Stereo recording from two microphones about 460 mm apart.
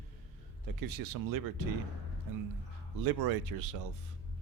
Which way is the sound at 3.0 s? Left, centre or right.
Right.